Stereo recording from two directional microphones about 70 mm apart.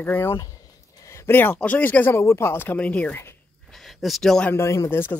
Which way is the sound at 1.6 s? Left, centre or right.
Left.